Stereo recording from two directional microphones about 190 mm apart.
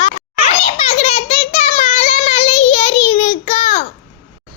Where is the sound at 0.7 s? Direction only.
30° left (ahead or behind).